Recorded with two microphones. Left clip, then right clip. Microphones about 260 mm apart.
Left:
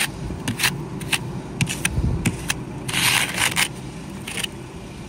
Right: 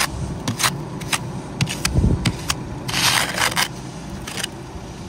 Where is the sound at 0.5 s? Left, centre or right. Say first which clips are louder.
Right 1 dB; right.